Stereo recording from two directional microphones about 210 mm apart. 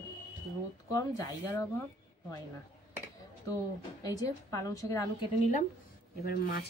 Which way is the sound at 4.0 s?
15° left (ahead or behind).